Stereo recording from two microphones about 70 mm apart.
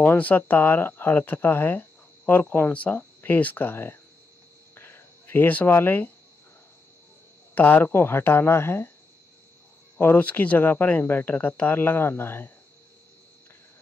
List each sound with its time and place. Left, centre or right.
0.0 s speech: left
4.7 s a sound: left
7.5 s speech: left
9.9 s speech: left